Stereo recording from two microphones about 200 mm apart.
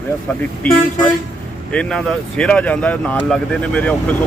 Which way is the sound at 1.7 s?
5° left (ahead or behind).